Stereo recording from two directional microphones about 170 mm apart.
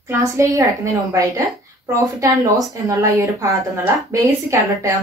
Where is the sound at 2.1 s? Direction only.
20° right (ahead or behind).